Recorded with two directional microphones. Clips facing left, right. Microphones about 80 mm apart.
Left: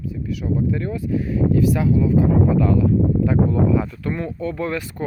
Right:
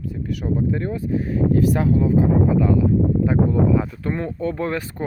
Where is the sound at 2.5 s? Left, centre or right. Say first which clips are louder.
Even; centre.